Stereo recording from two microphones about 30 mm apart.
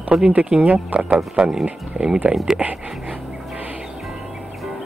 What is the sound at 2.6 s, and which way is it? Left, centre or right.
Speech, right.